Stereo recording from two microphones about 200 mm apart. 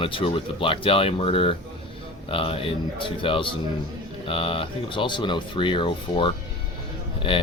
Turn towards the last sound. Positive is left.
turn(degrees=25)  # may be behind; listen again after turning